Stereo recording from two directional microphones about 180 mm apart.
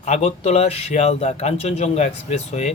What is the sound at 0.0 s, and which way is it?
Speech, 40° left (ahead or behind).